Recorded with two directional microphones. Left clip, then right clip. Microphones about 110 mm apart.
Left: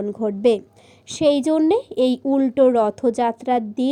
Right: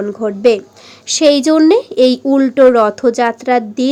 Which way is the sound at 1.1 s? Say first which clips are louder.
Right 8 dB; 20° left (ahead or behind).